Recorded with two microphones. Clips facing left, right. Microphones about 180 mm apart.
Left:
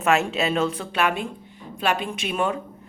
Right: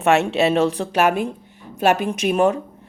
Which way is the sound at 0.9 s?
50° right (ahead or behind).